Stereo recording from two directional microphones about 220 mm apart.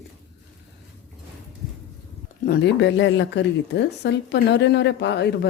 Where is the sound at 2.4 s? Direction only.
50° left (ahead or behind).